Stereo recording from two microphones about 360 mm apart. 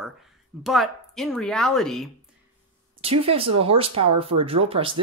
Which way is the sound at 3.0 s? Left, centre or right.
Centre.